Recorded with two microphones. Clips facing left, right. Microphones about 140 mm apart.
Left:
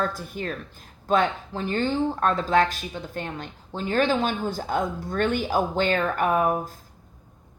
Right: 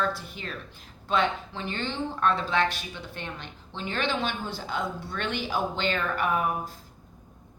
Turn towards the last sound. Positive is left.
turn(degrees=40)  # may be behind; listen again after turning